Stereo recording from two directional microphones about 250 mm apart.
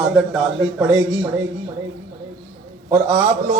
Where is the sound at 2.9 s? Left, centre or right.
Centre.